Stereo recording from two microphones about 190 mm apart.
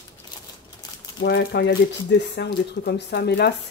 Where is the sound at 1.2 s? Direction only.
65° left (ahead or behind).